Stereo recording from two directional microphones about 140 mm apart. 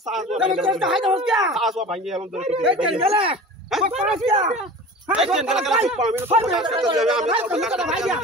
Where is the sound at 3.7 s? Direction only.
Centre (ahead or behind).